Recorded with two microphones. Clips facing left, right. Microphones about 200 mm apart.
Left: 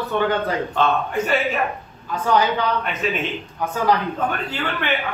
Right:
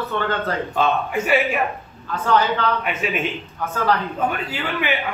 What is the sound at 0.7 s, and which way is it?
Speech, 10° right (ahead or behind).